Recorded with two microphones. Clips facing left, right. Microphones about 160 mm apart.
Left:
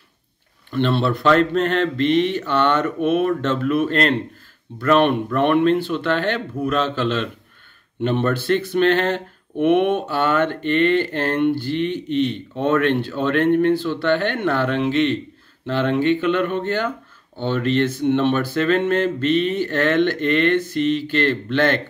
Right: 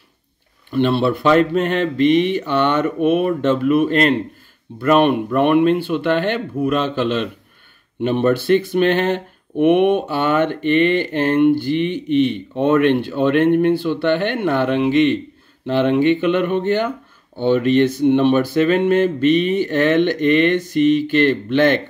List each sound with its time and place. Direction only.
0.7 s speech: 10° right (ahead or behind)